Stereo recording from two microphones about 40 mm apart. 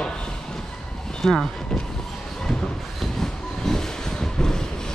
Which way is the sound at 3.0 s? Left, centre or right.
Centre.